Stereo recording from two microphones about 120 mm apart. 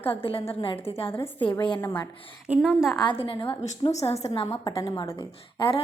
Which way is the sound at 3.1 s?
45° left (ahead or behind).